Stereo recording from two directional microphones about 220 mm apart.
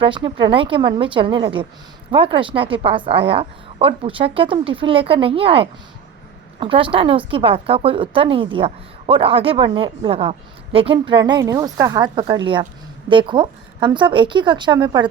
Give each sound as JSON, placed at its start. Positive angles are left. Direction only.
{"t": 0.0, "sound": "speech", "side_deg": -25}